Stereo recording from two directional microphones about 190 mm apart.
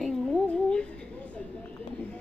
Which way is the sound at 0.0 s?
5° left (ahead or behind).